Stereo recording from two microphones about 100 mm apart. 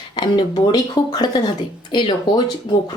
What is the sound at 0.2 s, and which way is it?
Speech, 45° left (ahead or behind).